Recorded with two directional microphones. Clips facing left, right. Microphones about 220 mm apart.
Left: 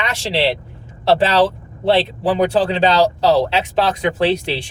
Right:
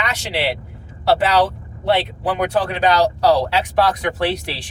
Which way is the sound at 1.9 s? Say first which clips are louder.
Left 3 dB; 30° left (ahead or behind).